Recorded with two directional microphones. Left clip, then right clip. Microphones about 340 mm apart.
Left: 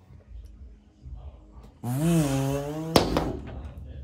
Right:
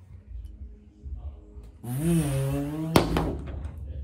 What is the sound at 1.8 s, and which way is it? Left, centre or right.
Speech, centre.